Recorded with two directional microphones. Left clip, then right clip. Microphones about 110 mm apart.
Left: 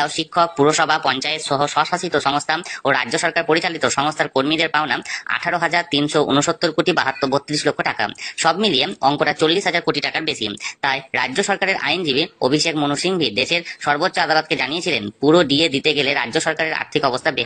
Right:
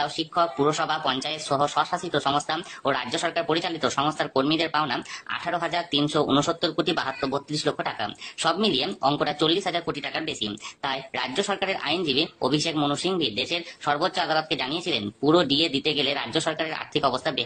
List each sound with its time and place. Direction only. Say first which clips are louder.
0.0 s speech: left 6 dB; 35° left (ahead or behind)